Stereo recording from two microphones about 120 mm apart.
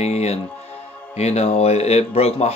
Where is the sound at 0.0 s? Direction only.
65° left (ahead or behind).